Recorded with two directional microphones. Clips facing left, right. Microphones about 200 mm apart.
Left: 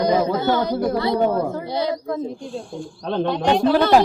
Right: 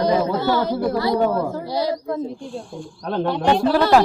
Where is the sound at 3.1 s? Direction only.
20° left (ahead or behind).